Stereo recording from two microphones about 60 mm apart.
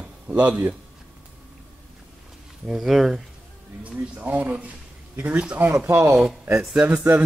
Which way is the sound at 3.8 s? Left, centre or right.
Right.